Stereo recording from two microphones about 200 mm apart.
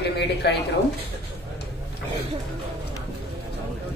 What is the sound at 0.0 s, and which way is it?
Speech, 55° left (ahead or behind).